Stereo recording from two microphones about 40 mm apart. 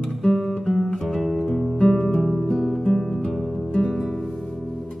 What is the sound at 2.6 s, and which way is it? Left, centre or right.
Music, centre.